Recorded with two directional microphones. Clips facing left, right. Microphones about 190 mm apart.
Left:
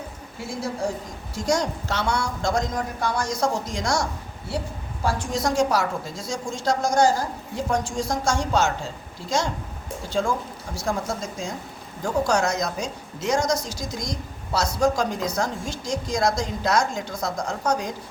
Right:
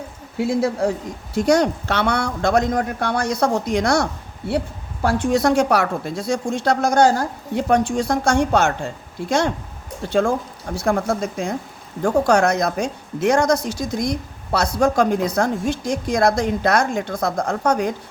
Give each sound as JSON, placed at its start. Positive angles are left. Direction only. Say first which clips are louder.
{"t": 0.3, "sound": "a woman's voice", "louder": "right 10 dB", "side_deg": -65}
{"t": 10.1, "sound": "a woman's voice", "louder": "right 6 dB", "side_deg": -60}